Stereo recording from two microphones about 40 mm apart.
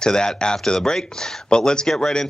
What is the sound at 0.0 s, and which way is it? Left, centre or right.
Speech, centre.